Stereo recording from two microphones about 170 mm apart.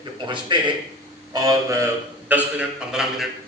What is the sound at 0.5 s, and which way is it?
Speech, 30° right (ahead or behind).